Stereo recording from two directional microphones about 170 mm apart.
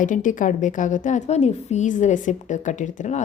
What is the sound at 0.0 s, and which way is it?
A woman's voice, 50° left (ahead or behind).